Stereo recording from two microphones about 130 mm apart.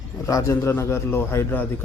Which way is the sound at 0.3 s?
25° left (ahead or behind).